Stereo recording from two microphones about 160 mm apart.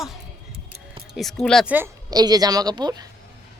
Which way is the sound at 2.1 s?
25° right (ahead or behind).